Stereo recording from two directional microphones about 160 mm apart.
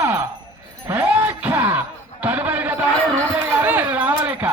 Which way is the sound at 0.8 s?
15° right (ahead or behind).